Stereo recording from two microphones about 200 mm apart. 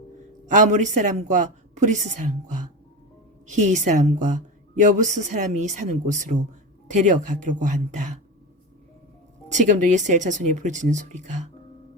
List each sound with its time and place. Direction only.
0.5 s a woman's voice: 40° right (ahead or behind)
9.5 s a woman's voice: 40° right (ahead or behind)